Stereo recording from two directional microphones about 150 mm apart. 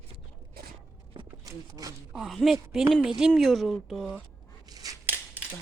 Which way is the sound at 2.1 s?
Centre (ahead or behind).